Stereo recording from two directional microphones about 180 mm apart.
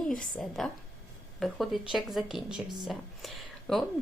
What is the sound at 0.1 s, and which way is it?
A woman's voice, 5° left (ahead or behind).